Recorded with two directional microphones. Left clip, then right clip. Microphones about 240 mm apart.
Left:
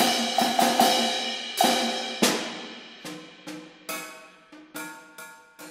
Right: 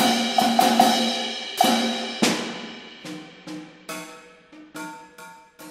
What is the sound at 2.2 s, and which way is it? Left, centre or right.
Music, left.